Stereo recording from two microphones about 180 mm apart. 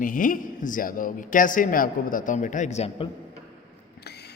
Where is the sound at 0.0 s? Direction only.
50° left (ahead or behind).